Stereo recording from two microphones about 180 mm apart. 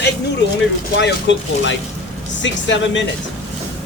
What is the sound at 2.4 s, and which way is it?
Speech, 90° left.